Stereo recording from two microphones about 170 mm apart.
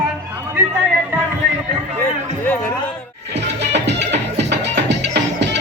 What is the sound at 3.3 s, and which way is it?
Music, 90° right.